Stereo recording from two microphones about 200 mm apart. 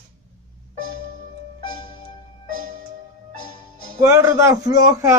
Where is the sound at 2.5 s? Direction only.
45° right (ahead or behind).